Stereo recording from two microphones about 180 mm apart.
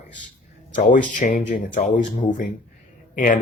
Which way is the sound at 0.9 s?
45° left (ahead or behind).